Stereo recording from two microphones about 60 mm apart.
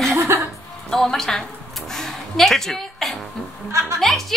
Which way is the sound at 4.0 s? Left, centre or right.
Centre.